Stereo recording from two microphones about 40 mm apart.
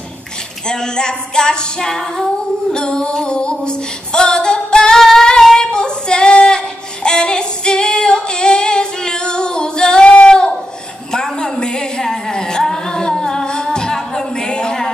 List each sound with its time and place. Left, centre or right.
0.7 s female singing: centre
10.2 s a sound: left
11.1 s music: centre